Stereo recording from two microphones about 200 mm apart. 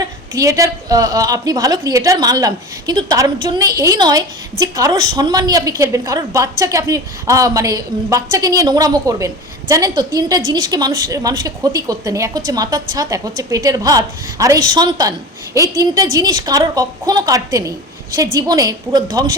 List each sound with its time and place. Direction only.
0.0 s a woman's voice: 15° right (ahead or behind)